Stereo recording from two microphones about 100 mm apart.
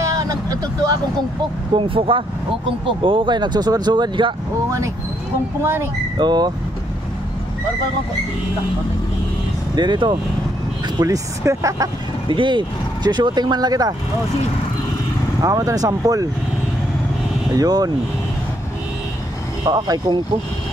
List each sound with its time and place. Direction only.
0.0 s vehicle: 35° right (ahead or behind)
1.8 s speech: 60° right (ahead or behind)
4.6 s speech: 30° right (ahead or behind)
6.1 s speech: 45° right (ahead or behind)
9.8 s speech: 50° right (ahead or behind)
11.0 s speech: 35° right (ahead or behind)
12.3 s speech: 50° right (ahead or behind)
15.4 s speech: 35° right (ahead or behind)
17.6 s speech: 40° right (ahead or behind)
19.6 s speech: 40° right (ahead or behind)